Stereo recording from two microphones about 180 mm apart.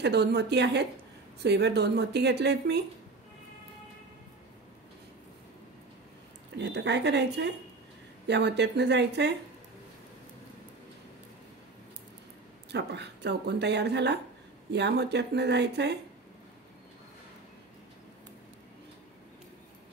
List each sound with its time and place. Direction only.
0.0 s a woman's voice: 65° right (ahead or behind)
6.6 s a woman's voice: 75° right (ahead or behind)
12.7 s a woman's voice: 70° right (ahead or behind)